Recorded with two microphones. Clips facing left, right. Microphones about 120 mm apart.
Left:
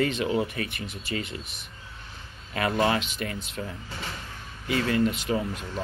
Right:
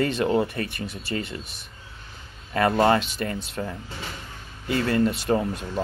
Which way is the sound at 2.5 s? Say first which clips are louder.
Right 5 dB; 45° right (ahead or behind).